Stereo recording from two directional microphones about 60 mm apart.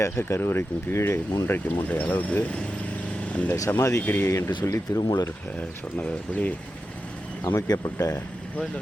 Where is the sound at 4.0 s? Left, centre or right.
Left.